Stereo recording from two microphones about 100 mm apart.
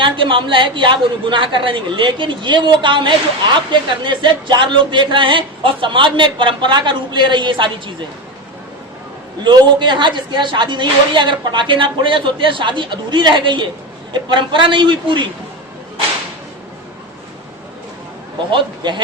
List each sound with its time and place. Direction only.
0.0 s speech: 60° right (ahead or behind)
9.4 s a woman's voice: 50° right (ahead or behind)
18.5 s a woman's voice: 50° right (ahead or behind)